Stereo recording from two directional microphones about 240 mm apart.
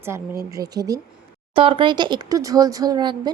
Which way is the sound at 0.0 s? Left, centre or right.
Centre.